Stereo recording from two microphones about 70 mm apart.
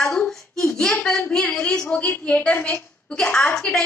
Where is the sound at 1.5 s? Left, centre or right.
Centre.